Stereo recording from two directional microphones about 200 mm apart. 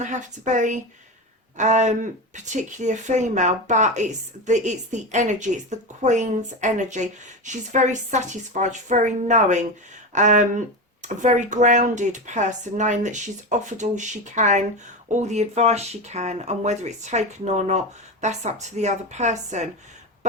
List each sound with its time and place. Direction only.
0.0 s speech: 40° right (ahead or behind)